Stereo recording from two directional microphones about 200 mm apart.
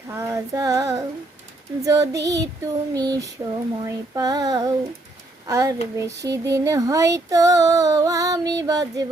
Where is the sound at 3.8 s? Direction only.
20° right (ahead or behind).